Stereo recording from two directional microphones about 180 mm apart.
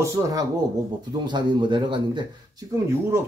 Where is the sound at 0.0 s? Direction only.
20° right (ahead or behind).